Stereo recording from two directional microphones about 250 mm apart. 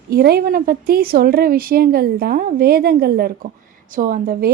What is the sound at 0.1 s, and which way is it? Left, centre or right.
A woman's voice, right.